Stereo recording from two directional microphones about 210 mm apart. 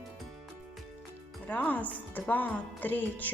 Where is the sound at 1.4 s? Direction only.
5° left (ahead or behind).